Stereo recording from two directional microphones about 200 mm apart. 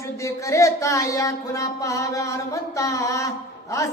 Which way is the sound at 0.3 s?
15° left (ahead or behind).